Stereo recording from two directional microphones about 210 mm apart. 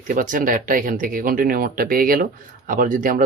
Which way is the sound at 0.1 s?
40° right (ahead or behind).